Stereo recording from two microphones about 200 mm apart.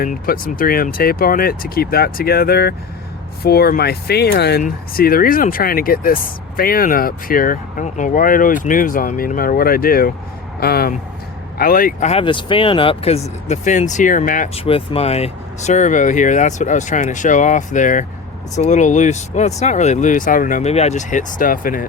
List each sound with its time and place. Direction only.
0.0 s speech: 45° left (ahead or behind)